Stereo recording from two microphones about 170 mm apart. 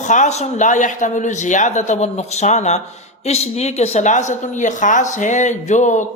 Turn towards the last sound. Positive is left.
turn(degrees=45)  # may be behind; listen again after turning